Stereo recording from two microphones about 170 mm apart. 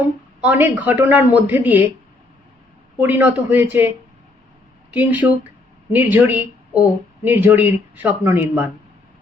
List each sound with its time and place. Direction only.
0.4 s speech: 10° right (ahead or behind)
3.0 s speech: 10° right (ahead or behind)